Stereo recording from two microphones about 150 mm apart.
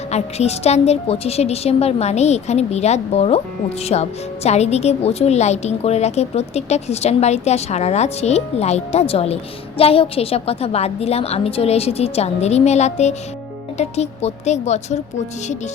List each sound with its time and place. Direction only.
0.1 s a woman's voice: 45° left (ahead or behind)